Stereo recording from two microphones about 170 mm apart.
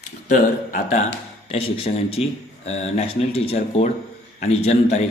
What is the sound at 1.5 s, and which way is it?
Speech, 35° left (ahead or behind).